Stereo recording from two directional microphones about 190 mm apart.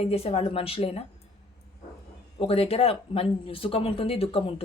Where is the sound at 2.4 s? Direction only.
30° left (ahead or behind).